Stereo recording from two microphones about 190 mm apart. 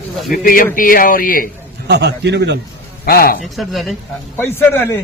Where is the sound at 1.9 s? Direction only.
60° right (ahead or behind).